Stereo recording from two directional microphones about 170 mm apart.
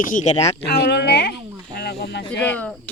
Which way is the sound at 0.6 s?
75° left (ahead or behind).